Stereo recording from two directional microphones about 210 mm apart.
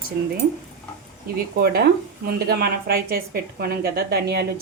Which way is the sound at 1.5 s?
50° right (ahead or behind).